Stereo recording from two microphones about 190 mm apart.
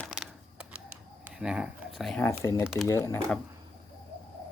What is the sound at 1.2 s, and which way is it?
Speech, 5° right (ahead or behind).